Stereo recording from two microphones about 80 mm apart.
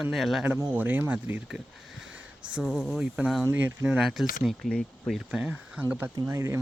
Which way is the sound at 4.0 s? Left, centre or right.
Centre.